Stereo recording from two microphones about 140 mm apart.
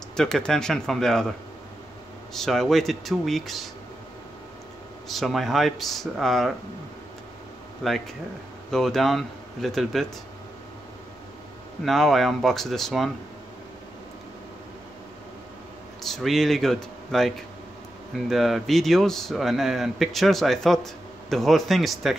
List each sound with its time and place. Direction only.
0.1 s a man's voice: 5° left (ahead or behind)
2.3 s a man's voice: centre (ahead or behind)
5.0 s a man's voice: centre (ahead or behind)
7.8 s a man's voice: centre (ahead or behind)
11.8 s a man's voice: centre (ahead or behind)
16.0 s speech: centre (ahead or behind)
18.3 s a man's voice: centre (ahead or behind)